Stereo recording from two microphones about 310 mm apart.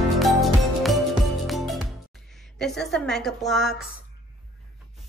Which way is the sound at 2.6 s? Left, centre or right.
Centre.